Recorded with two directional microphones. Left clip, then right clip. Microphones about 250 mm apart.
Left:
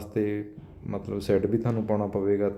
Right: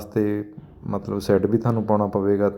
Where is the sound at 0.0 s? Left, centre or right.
Centre.